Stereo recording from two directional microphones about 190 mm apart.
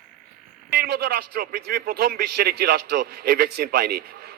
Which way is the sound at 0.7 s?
55° right (ahead or behind).